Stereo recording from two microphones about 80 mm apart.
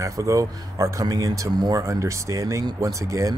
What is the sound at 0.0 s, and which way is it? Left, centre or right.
Speech, right.